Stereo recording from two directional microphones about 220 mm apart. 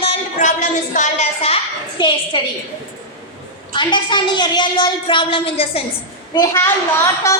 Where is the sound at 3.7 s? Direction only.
20° left (ahead or behind).